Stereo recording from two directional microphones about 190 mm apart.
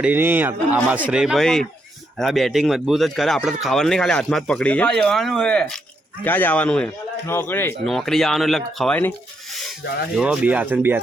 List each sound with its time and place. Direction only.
0.0 s speech: 10° right (ahead or behind)
9.8 s speech: 60° left (ahead or behind)
10.2 s speech: 5° right (ahead or behind)